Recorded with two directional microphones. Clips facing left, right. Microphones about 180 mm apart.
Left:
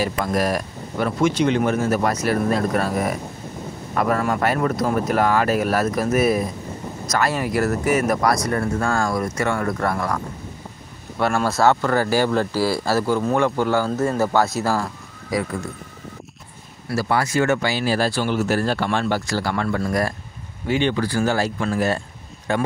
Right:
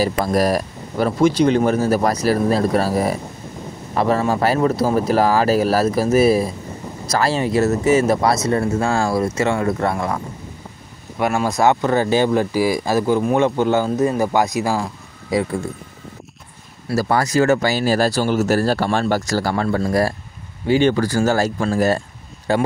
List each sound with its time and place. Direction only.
0.0 s speech: 35° right (ahead or behind)
11.1 s speech: 10° right (ahead or behind)
15.3 s speech: 25° right (ahead or behind)
16.9 s speech: 40° right (ahead or behind)